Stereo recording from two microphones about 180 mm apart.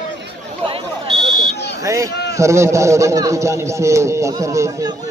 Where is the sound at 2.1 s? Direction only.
65° left (ahead or behind).